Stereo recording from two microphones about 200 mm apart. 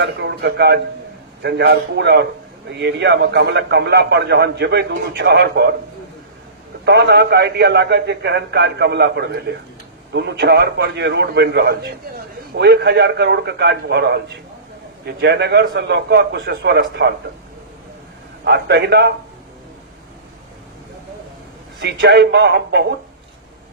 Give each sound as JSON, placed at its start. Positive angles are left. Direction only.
{"t": 0.0, "sound": "a man's voice", "side_deg": -55}
{"t": 6.8, "sound": "a man's voice", "side_deg": -55}
{"t": 18.4, "sound": "a man's voice", "side_deg": -60}
{"t": 21.8, "sound": "a man's voice", "side_deg": -55}